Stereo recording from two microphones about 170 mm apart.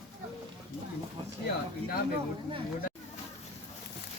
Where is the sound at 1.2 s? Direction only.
25° right (ahead or behind).